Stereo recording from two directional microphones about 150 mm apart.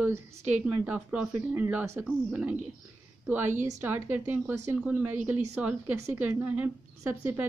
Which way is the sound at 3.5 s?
50° right (ahead or behind).